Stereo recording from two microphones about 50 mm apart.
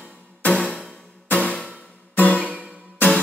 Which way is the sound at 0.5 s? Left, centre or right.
Centre.